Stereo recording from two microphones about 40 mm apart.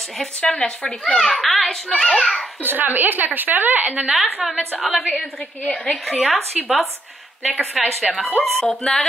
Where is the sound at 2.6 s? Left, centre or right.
Right.